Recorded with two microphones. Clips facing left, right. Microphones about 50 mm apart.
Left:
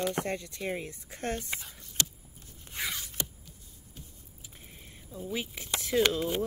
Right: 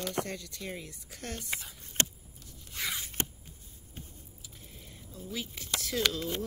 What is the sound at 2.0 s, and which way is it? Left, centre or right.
Vehicle, right.